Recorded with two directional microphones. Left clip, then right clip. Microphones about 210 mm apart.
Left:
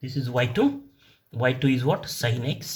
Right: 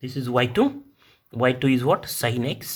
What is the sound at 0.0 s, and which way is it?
Speech, 45° right (ahead or behind).